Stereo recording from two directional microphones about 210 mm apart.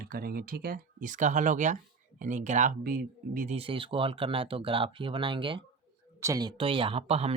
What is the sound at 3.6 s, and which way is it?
Speech, 25° right (ahead or behind).